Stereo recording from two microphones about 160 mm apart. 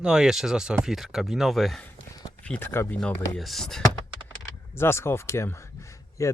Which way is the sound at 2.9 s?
Centre (ahead or behind).